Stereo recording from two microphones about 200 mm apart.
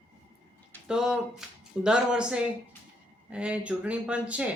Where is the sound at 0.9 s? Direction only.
5° right (ahead or behind).